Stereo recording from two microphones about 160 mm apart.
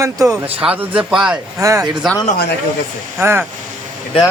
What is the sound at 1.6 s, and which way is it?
Speech, 20° right (ahead or behind).